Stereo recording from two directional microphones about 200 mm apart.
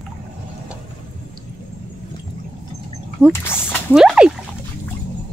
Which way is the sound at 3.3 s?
10° left (ahead or behind).